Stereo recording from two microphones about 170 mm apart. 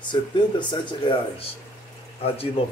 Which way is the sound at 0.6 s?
25° left (ahead or behind).